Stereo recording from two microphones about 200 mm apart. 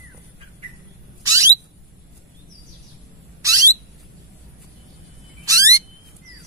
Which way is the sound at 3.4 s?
15° right (ahead or behind).